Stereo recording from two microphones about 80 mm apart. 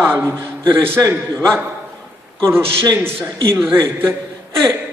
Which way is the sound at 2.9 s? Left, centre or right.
Right.